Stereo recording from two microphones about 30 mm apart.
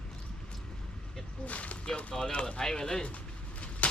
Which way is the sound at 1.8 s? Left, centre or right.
Left.